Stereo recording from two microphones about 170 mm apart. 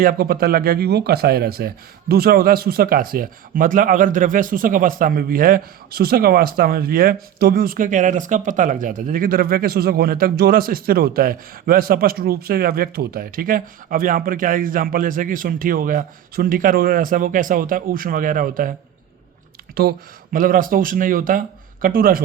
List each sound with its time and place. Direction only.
0.0 s speech: 60° right (ahead or behind)
19.7 s speech: 65° right (ahead or behind)